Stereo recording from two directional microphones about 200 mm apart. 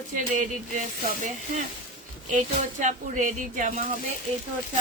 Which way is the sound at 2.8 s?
40° right (ahead or behind).